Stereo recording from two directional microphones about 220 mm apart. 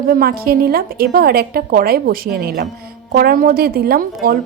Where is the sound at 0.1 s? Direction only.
40° right (ahead or behind).